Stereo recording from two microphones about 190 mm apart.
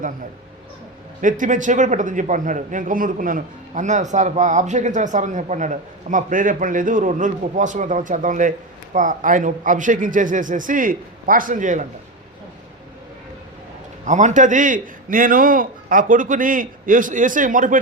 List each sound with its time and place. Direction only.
1.2 s a man's voice: 45° right (ahead or behind)
14.0 s a man's voice: 40° right (ahead or behind)